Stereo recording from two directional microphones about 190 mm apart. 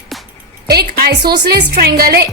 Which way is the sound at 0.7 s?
60° right (ahead or behind).